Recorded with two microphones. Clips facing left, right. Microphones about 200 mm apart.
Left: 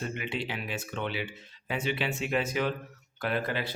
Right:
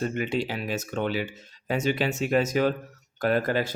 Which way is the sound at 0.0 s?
40° right (ahead or behind).